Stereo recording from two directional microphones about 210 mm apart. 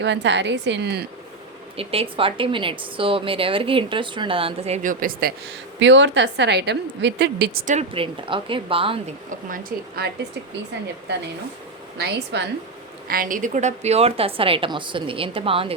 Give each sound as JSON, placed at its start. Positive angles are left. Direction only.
{"t": 0.0, "sound": "a woman's voice", "side_deg": -60}
{"t": 1.7, "sound": "a woman's voice", "side_deg": -25}
{"t": 5.8, "sound": "a woman's voice", "side_deg": -60}
{"t": 7.7, "sound": "a woman's voice", "side_deg": -30}
{"t": 9.5, "sound": "a woman's voice", "side_deg": -45}
{"t": 11.9, "sound": "a woman's voice", "side_deg": -50}
{"t": 13.1, "sound": "a woman's voice", "side_deg": -40}